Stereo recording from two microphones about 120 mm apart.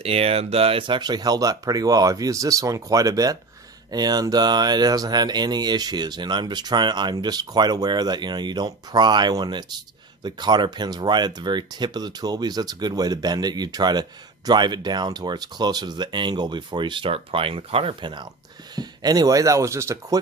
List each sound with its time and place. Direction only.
0.0 s speech: 55° right (ahead or behind); by 20.1 s 25° right (ahead or behind)